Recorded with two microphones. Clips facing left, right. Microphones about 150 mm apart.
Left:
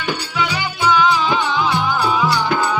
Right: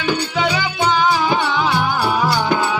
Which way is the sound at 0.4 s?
60° right (ahead or behind).